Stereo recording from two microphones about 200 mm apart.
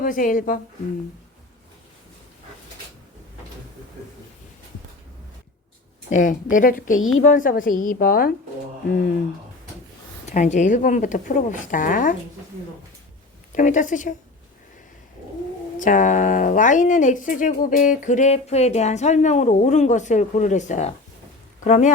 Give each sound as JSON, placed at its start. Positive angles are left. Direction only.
{"t": 0.0, "sound": "a woman's voice", "side_deg": 40}
{"t": 6.1, "sound": "a woman's voice", "side_deg": 40}
{"t": 10.2, "sound": "speech", "side_deg": 35}
{"t": 13.6, "sound": "speech", "side_deg": 40}
{"t": 15.8, "sound": "speech", "side_deg": 40}